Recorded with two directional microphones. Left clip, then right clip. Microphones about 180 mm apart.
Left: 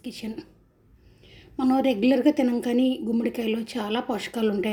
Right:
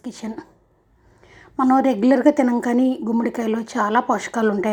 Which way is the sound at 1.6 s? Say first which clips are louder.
Right 6 dB; centre (ahead or behind).